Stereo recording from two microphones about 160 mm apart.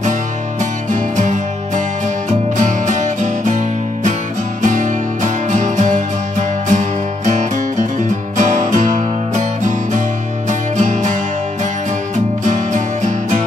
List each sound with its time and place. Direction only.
0.6 s music: 50° right (ahead or behind)
2.5 s music: 50° right (ahead or behind)
12.4 s music: 50° right (ahead or behind)